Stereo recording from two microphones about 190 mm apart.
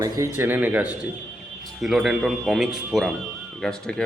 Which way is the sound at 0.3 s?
10° right (ahead or behind).